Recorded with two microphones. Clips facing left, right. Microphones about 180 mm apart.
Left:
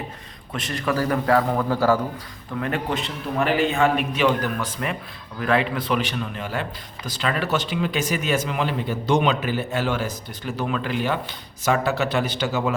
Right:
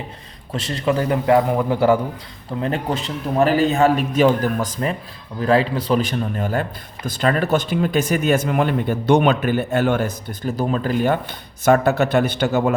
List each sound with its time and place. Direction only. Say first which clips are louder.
0.5 s a man's voice: right 4 dB; 30° right (ahead or behind); by 12.7 s 55° right (ahead or behind)